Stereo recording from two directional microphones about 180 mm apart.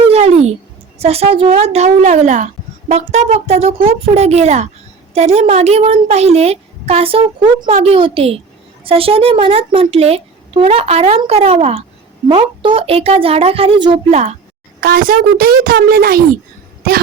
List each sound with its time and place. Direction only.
0.1 s a sound: 35° right (ahead or behind)
0.9 s a woman's voice: 35° right (ahead or behind)
14.1 s a woman's voice: 40° right (ahead or behind)
14.8 s a woman's voice: 55° right (ahead or behind)